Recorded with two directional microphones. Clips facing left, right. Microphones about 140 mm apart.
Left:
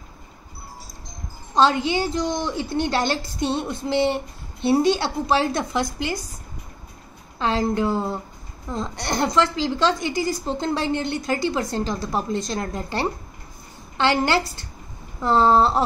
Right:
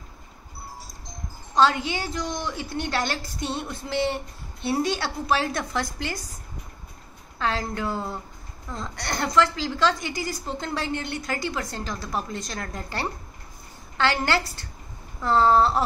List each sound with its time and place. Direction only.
1.5 s a woman's voice: 25° left (ahead or behind)
7.3 s a woman's voice: 20° left (ahead or behind)